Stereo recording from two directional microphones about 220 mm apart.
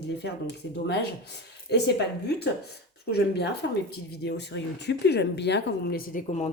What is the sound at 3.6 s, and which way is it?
A woman's voice, 55° left (ahead or behind).